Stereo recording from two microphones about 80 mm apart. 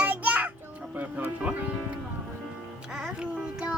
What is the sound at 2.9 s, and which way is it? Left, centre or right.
Music, centre.